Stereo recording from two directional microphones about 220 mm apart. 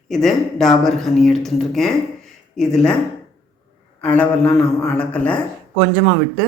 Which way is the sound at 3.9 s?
5° left (ahead or behind).